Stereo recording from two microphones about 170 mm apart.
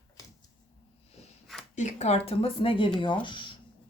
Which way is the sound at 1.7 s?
45° left (ahead or behind).